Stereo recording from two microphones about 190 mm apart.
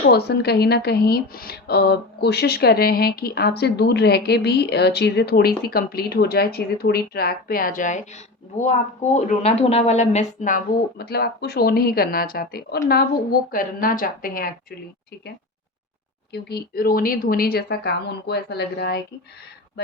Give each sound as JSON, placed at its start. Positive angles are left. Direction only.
{"t": 0.0, "sound": "speech", "side_deg": 60}
{"t": 9.1, "sound": "a woman's voice", "side_deg": 35}
{"t": 16.3, "sound": "speech", "side_deg": 55}